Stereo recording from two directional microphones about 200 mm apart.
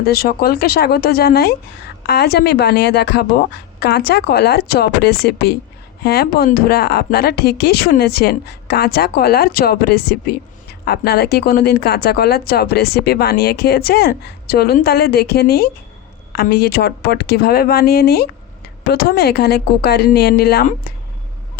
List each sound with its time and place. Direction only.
0.0 s speech: 50° left (ahead or behind)